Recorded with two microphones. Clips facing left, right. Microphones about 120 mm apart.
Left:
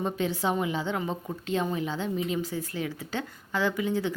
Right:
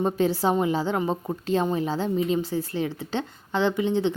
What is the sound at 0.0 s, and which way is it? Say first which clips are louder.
A woman's voice: right 6 dB; 35° right (ahead or behind).